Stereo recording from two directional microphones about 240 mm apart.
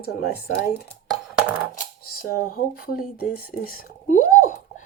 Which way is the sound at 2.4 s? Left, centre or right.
Left.